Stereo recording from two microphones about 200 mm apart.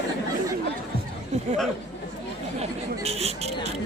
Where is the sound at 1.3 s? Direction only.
35° right (ahead or behind).